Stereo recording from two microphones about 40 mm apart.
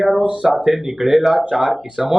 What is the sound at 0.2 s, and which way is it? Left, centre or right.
Speech, right.